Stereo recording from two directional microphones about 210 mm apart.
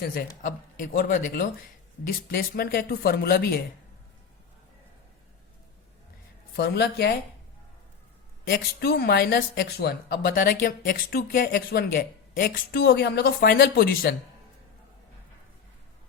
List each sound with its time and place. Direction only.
0.1 s speech: 40° left (ahead or behind)
6.6 s speech: 50° left (ahead or behind)
8.4 s speech: 45° left (ahead or behind)